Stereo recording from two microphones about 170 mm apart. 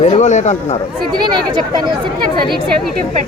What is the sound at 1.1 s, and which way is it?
Speech, 25° right (ahead or behind).